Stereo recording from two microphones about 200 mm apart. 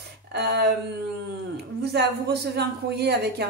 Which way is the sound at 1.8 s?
55° right (ahead or behind).